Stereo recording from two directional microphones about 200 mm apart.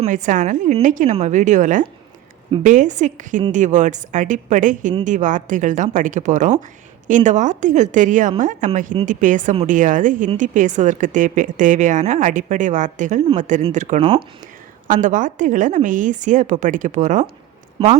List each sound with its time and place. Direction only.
0.0 s speech: 40° right (ahead or behind)
17.8 s speech: 25° right (ahead or behind)